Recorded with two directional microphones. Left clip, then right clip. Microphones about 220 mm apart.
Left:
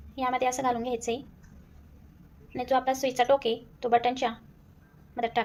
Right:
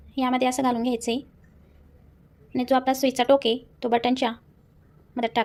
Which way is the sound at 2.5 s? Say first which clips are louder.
Right 4 dB; 40° right (ahead or behind).